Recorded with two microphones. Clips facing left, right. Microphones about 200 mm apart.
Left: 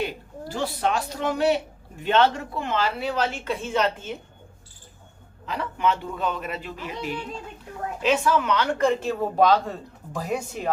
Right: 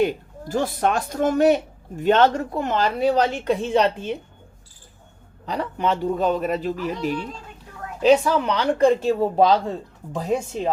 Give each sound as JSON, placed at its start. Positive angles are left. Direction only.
{"t": 0.0, "sound": "a woman's voice", "side_deg": -45}
{"t": 5.5, "sound": "speech", "side_deg": -40}